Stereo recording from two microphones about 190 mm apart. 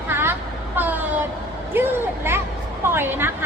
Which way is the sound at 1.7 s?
10° right (ahead or behind).